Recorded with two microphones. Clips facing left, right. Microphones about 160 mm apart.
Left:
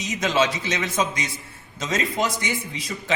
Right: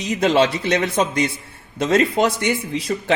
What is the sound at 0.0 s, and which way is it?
Speech, 60° right (ahead or behind).